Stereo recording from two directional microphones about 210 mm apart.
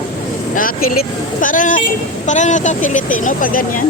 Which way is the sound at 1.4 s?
40° left (ahead or behind).